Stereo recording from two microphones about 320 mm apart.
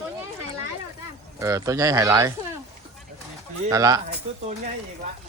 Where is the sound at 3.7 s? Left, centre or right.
Centre.